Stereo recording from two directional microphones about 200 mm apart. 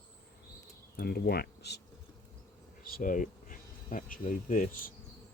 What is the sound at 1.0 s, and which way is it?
Speech, 50° left (ahead or behind).